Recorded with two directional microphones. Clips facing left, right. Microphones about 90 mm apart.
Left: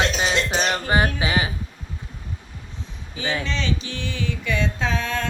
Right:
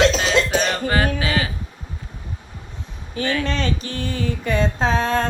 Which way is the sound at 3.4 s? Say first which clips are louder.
Right 3 dB; 50° right (ahead or behind).